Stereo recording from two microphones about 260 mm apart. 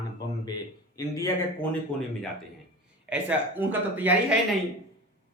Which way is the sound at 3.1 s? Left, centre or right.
Centre.